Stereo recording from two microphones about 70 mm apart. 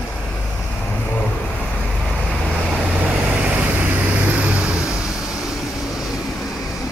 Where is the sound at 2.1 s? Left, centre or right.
Centre.